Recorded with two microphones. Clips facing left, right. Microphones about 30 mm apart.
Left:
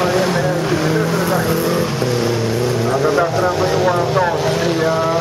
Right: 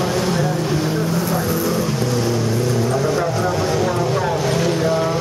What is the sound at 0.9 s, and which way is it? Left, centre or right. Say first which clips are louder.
Vehicle: left 4 dB; left.